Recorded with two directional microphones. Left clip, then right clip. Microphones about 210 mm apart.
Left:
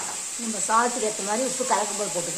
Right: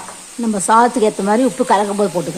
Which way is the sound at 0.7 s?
50° right (ahead or behind).